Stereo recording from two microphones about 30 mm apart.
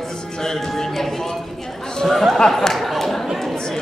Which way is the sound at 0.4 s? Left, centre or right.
Centre.